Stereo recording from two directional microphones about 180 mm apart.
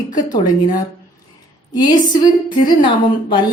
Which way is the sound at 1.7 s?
25° left (ahead or behind).